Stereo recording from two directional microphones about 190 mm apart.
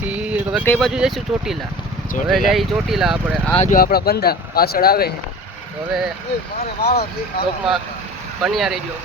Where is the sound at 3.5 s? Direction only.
45° left (ahead or behind).